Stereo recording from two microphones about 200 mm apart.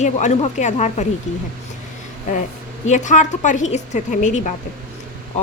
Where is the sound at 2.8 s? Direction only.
35° left (ahead or behind).